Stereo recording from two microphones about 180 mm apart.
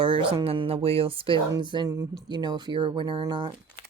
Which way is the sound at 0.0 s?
30° right (ahead or behind).